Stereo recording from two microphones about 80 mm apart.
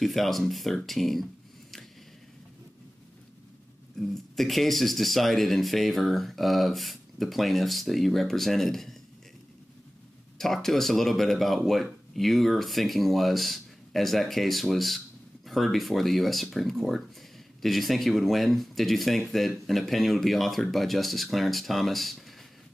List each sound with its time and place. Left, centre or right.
0.0 s speech: centre
4.0 s speech: centre
10.3 s speech: centre